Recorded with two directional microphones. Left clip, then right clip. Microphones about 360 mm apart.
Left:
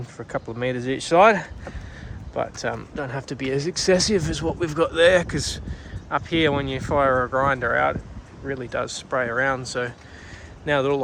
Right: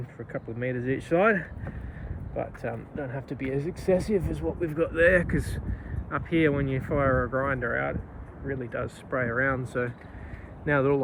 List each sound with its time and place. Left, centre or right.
0.6 s speech: centre
2.6 s speech: centre